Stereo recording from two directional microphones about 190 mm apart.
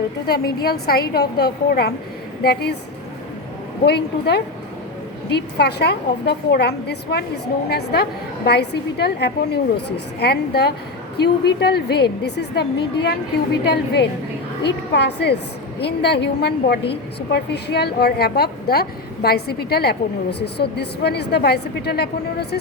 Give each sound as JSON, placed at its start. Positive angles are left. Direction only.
{"t": 0.3, "sound": "a woman's voice", "side_deg": 55}
{"t": 3.8, "sound": "a woman's voice", "side_deg": 60}